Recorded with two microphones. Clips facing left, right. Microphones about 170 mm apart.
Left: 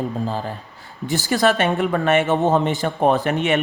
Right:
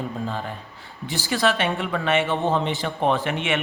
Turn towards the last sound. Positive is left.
turn(degrees=40)  # may be behind; listen again after turning